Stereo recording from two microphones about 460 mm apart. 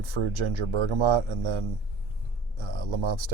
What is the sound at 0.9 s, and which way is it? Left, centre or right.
Speech, right.